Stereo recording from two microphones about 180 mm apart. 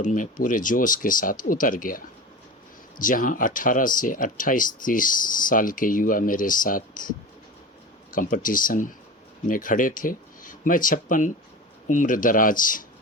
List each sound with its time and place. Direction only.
0.0 s speech: 45° left (ahead or behind)
8.1 s speech: 50° left (ahead or behind)